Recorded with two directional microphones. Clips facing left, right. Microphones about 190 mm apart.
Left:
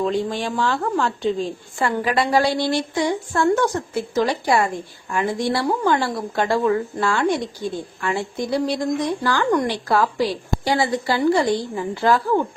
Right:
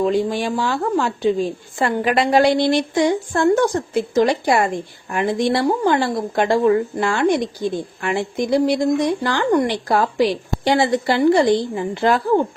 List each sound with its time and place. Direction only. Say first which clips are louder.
0.0 s a woman's voice: right 4 dB; 10° right (ahead or behind)
1.8 s a woman's voice: right 3 dB; 25° right (ahead or behind)